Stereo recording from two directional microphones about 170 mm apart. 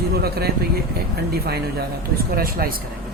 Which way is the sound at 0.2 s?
65° right (ahead or behind).